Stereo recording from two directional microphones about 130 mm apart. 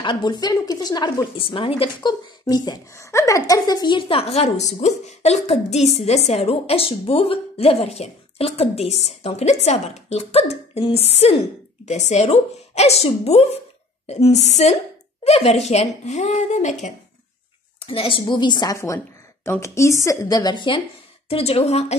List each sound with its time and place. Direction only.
0.0 s a woman's voice: 35° left (ahead or behind); by 14.8 s 60° left (ahead or behind)
15.2 s speech: 50° left (ahead or behind)
17.7 s a woman's voice: 45° left (ahead or behind)
19.4 s a woman's voice: 20° left (ahead or behind); by 20.8 s 40° left (ahead or behind)
21.3 s a woman's voice: 50° left (ahead or behind)